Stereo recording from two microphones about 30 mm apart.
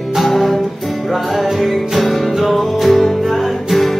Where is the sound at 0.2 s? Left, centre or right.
Centre.